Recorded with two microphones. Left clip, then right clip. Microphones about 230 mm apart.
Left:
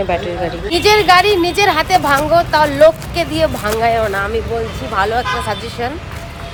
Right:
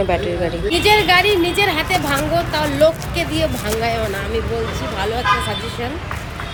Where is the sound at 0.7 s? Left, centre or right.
Left.